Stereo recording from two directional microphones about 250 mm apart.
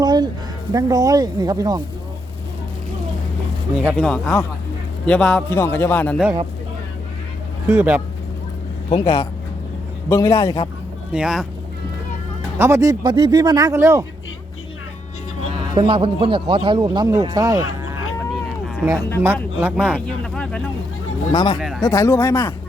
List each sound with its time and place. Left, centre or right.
0.0 s a sound: centre
0.7 s speech: centre
4.0 s a man's voice: centre
7.7 s speech: centre
8.9 s a man's voice: centre
11.1 s speech: centre
12.5 s speech: centre
15.7 s speech: centre
21.3 s a man's voice: centre
21.6 s speech: centre
21.8 s a man's voice: centre